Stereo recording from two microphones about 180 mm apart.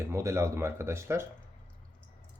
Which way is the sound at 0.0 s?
15° right (ahead or behind).